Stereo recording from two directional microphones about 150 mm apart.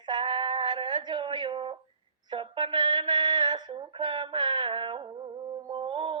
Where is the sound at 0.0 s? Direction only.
30° right (ahead or behind).